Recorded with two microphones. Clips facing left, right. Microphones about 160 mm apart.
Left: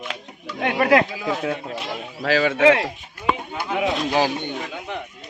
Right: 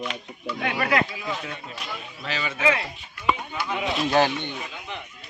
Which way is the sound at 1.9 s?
90° left.